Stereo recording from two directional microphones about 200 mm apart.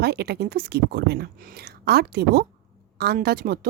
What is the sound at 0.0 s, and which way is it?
A woman's voice, 55° right (ahead or behind).